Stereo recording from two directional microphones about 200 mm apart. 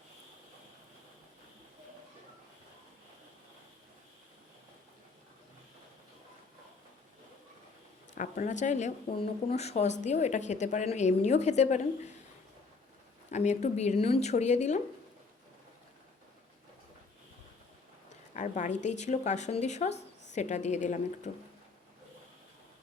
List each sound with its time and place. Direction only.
8.1 s speech: 40° left (ahead or behind)
13.3 s speech: 35° left (ahead or behind)
18.3 s speech: 35° left (ahead or behind)
19.9 s a sound: 60° left (ahead or behind)
20.3 s speech: 35° left (ahead or behind)